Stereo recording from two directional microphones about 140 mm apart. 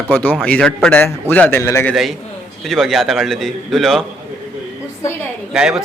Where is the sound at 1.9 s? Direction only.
Centre (ahead or behind).